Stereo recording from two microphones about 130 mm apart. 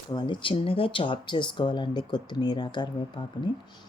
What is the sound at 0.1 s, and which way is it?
Speech, 35° left (ahead or behind).